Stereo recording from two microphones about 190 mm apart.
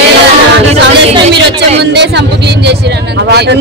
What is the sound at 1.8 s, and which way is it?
A woman's voice, 60° right (ahead or behind).